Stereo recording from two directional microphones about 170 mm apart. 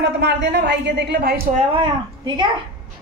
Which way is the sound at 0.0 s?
85° right.